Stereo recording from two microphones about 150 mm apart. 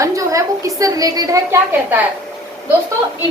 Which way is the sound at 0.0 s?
20° right (ahead or behind).